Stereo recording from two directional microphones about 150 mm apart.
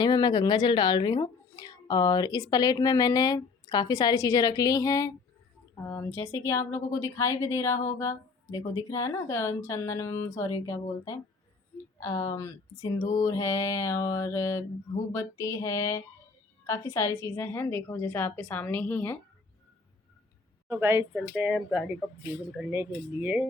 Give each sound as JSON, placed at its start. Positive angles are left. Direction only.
{"t": 0.0, "sound": "a woman's voice", "side_deg": 30}
{"t": 20.7, "sound": "speech", "side_deg": -20}
{"t": 21.1, "sound": "speech", "side_deg": -5}
{"t": 22.9, "sound": "speech", "side_deg": -10}